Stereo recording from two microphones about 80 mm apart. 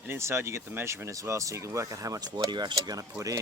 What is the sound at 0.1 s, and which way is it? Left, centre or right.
Speech, right.